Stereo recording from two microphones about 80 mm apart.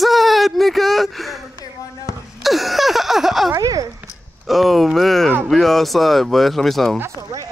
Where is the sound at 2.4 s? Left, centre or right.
Centre.